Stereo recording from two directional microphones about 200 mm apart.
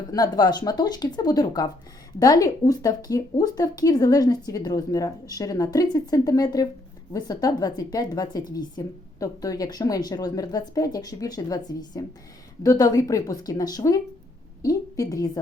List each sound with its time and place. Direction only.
0.1 s speech: 20° left (ahead or behind)